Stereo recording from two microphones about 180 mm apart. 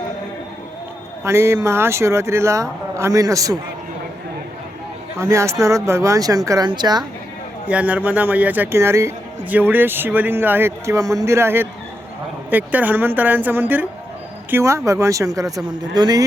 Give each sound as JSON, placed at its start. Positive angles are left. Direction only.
{"t": 1.2, "sound": "a man's voice", "side_deg": -15}
{"t": 5.1, "sound": "a man's voice", "side_deg": -15}
{"t": 7.7, "sound": "a man's voice", "side_deg": -10}